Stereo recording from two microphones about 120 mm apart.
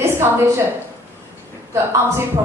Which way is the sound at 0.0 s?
20° right (ahead or behind).